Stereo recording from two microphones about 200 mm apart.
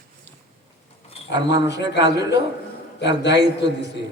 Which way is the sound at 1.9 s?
60° left (ahead or behind).